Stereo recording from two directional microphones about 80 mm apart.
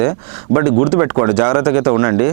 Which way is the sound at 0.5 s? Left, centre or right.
Right.